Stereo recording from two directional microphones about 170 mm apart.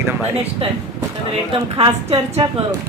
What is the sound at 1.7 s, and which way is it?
Speech, 35° right (ahead or behind).